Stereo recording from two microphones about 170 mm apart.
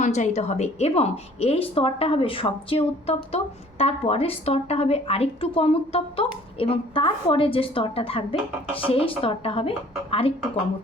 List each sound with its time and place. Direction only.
0.0 s a woman's voice: 45° left (ahead or behind)